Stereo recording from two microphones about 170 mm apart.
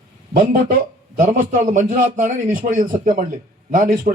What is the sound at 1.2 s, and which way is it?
A man's voice, 50° right (ahead or behind).